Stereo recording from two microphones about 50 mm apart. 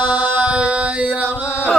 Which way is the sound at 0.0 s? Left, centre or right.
Right.